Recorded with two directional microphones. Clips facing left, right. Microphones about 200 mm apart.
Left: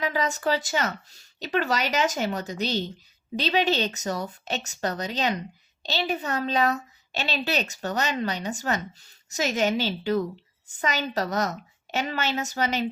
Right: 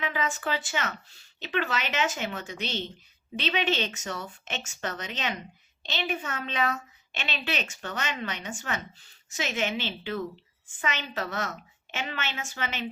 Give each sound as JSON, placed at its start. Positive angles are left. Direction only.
{"t": 0.0, "sound": "a woman's voice", "side_deg": 40}